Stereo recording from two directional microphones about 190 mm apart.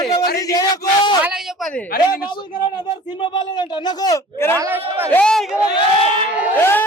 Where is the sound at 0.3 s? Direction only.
20° left (ahead or behind).